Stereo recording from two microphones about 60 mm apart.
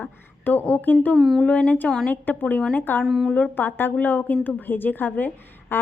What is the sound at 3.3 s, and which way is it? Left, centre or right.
A woman's voice, left.